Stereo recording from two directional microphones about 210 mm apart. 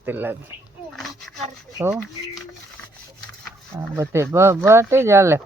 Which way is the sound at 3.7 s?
10° right (ahead or behind).